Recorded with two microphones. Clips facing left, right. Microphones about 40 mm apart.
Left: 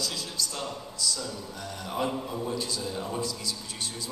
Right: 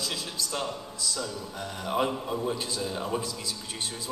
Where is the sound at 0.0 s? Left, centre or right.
Right.